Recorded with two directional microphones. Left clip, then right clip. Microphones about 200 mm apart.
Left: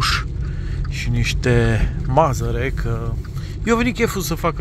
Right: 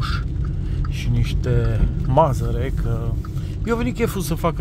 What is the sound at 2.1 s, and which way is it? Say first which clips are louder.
Speech: left 1 dB; centre (ahead or behind).